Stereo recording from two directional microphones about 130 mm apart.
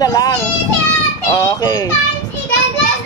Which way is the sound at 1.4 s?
30° left (ahead or behind).